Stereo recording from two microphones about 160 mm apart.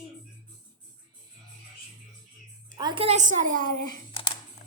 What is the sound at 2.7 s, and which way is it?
A woman's voice, 30° right (ahead or behind).